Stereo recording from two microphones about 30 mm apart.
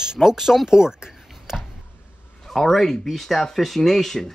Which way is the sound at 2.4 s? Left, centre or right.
Centre.